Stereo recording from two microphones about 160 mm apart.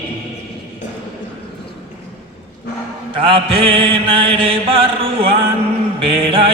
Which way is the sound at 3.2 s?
35° right (ahead or behind).